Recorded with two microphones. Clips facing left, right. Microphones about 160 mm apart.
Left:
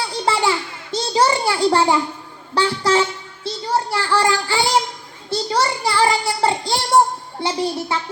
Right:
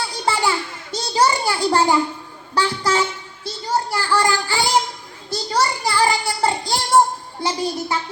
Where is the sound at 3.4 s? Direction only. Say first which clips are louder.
Left 1 dB; 30° left (ahead or behind).